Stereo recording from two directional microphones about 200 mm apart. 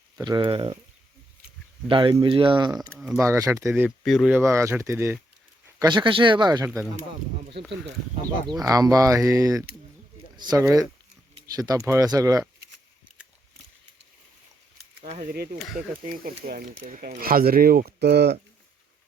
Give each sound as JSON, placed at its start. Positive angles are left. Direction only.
{"t": 0.2, "sound": "speech", "side_deg": -20}
{"t": 1.9, "sound": "speech", "side_deg": -25}
{"t": 2.9, "sound": "speech", "side_deg": 0}
{"t": 3.2, "sound": "speech", "side_deg": -15}
{"t": 4.0, "sound": "speech", "side_deg": 0}
{"t": 4.4, "sound": "speech", "side_deg": -15}
{"t": 5.8, "sound": "speech", "side_deg": -25}
{"t": 8.7, "sound": "speech", "side_deg": -20}
{"t": 15.0, "sound": "speech", "side_deg": -40}